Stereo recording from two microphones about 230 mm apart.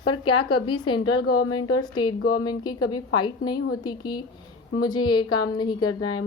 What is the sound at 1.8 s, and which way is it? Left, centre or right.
A woman's voice, centre.